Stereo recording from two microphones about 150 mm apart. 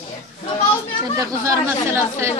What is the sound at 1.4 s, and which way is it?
Speech, 20° right (ahead or behind).